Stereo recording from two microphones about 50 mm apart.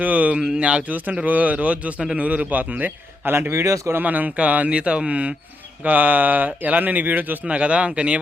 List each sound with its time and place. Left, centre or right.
0.0 s speech: right
3.3 s speech: right
3.9 s speech: right
7.4 s speech: right